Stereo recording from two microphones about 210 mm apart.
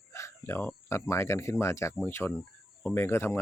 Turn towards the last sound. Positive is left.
turn(degrees=10)  # may be behind; listen again after turning